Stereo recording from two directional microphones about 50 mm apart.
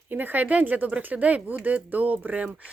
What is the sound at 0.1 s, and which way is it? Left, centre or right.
Speech, right.